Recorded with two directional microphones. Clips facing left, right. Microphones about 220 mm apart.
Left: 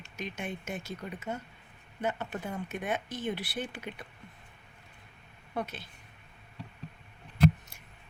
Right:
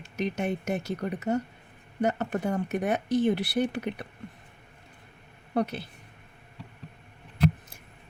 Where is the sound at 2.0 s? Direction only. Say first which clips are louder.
Right 7 dB; 40° right (ahead or behind).